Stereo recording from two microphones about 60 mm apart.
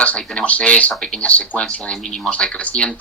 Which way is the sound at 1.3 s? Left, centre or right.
Left.